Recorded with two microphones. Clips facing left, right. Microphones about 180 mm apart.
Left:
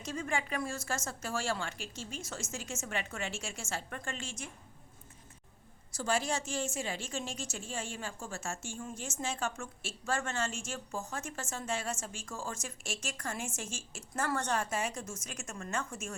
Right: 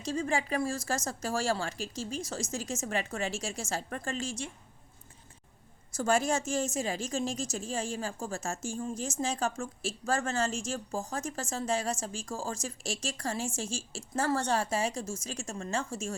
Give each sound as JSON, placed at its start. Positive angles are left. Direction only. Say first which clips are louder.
{"t": 0.0, "sound": "a woman's voice", "louder": "right 5 dB", "side_deg": -35}
{"t": 5.9, "sound": "a woman's voice", "louder": "right 5 dB", "side_deg": -45}